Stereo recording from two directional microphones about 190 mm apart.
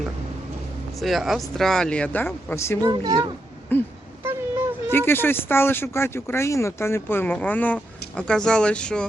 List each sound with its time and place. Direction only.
0.9 s speech: centre (ahead or behind)
2.8 s a child's voice: 20° right (ahead or behind)
3.7 s speech: 10° left (ahead or behind)
4.2 s a sound: 15° right (ahead or behind)
4.9 s speech: 10° left (ahead or behind)